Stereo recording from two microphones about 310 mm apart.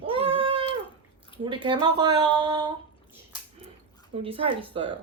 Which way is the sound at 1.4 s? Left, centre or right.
Centre.